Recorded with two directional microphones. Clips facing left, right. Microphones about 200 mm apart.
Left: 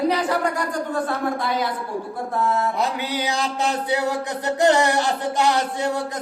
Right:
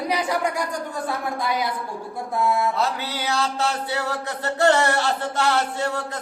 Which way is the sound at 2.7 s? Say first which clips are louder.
Left 2 dB; 15° left (ahead or behind).